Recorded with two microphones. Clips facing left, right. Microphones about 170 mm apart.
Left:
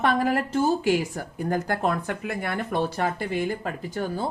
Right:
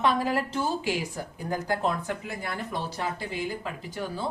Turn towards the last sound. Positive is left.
turn(degrees=50)  # may be behind; listen again after turning